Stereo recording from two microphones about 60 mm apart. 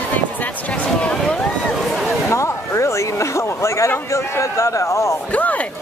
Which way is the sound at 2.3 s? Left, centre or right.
Left.